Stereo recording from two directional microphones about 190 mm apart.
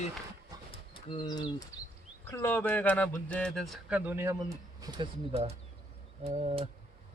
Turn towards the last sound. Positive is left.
turn(degrees=-30)  # may be behind; listen again after turning